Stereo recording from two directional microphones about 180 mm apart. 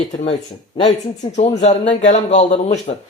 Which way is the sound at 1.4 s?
35° left (ahead or behind).